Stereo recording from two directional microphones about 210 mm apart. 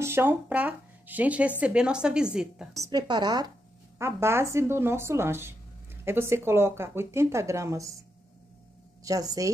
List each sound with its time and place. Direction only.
0.0 s a woman's voice: 10° right (ahead or behind)
2.8 s a woman's voice: 20° right (ahead or behind)
9.0 s speech: 15° right (ahead or behind)